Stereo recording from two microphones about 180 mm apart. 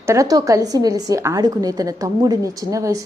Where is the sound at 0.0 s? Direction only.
15° right (ahead or behind).